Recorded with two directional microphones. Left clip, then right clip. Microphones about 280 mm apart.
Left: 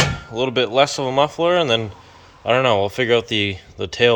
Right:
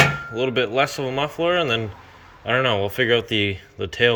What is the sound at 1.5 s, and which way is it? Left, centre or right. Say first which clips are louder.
Speech: left 3 dB; left.